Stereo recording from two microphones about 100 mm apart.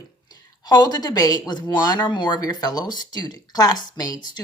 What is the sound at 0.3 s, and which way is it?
Speech, 45° left (ahead or behind).